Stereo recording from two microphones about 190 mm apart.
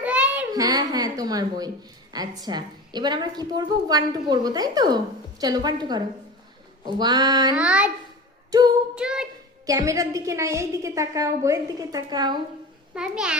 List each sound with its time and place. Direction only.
0.0 s a sound: 5° right (ahead or behind)
0.5 s a woman's voice: 20° right (ahead or behind)
7.5 s a woman's voice: 5° right (ahead or behind)
8.5 s a woman's voice: 20° right (ahead or behind)
9.0 s a child's voice: 5° right (ahead or behind)
9.6 s a woman's voice: 15° right (ahead or behind)
12.9 s a child's voice: 5° right (ahead or behind)